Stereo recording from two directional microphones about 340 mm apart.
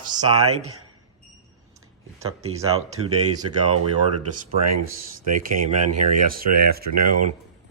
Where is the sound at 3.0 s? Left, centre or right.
Right.